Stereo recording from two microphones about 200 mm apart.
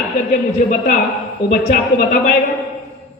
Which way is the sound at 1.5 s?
40° left (ahead or behind).